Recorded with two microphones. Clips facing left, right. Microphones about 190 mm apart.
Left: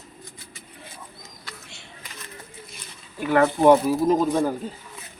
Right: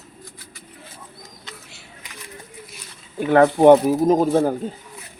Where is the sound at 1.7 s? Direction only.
5° right (ahead or behind).